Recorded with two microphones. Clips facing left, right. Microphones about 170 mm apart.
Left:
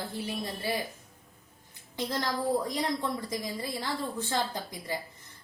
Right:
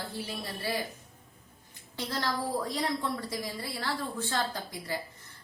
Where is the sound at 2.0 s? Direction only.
15° left (ahead or behind).